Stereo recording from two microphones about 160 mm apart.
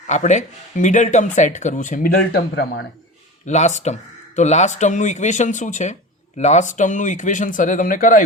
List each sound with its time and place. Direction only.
0.1 s speech: 50° left (ahead or behind)
2.1 s speech: 85° left
3.4 s speech: 45° left (ahead or behind)